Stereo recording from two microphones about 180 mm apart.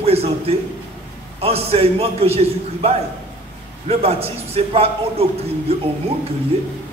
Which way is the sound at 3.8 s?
35° right (ahead or behind).